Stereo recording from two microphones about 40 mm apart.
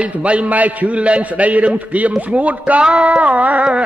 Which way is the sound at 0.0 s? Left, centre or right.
Right.